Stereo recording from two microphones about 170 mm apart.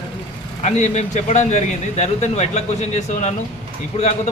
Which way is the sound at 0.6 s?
40° left (ahead or behind).